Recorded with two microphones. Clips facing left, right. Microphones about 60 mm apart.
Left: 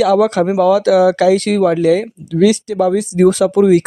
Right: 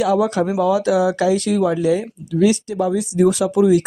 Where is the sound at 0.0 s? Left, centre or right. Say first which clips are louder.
Left 5 dB; left.